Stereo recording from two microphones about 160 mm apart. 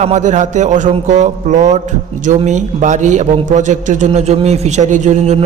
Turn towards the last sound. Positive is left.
turn(degrees=-45)  # may be behind; listen again after turning